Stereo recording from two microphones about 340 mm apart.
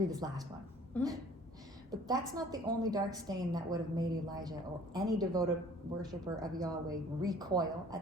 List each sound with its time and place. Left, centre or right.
0.1 s a woman's voice: centre
0.9 s speech: centre
1.9 s a woman's voice: centre